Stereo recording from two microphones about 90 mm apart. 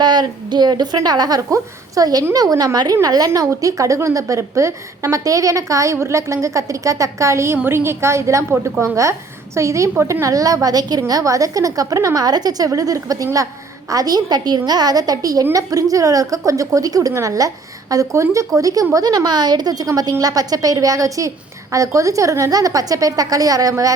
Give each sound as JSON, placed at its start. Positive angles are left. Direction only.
{"t": 0.0, "sound": "a woman's voice", "side_deg": -50}